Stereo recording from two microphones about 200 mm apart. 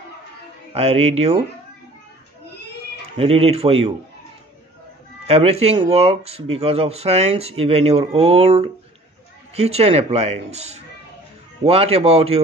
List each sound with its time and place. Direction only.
0.7 s speech: 30° right (ahead or behind)
3.2 s speech: 30° right (ahead or behind)
5.3 s speech: 30° right (ahead or behind)